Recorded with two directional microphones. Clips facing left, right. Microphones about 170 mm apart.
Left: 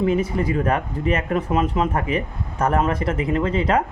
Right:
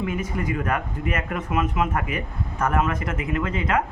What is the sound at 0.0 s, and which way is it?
Speech, 30° left (ahead or behind).